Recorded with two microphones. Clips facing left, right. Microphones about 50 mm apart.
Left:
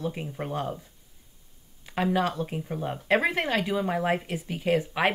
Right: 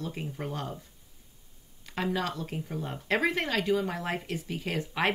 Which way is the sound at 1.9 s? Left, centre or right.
Centre.